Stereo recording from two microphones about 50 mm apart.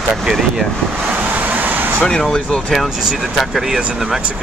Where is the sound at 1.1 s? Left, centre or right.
Right.